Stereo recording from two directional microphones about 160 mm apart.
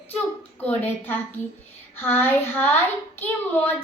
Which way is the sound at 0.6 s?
10° left (ahead or behind).